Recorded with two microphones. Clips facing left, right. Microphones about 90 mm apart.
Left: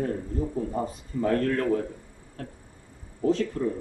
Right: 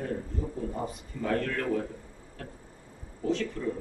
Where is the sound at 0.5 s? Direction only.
35° left (ahead or behind).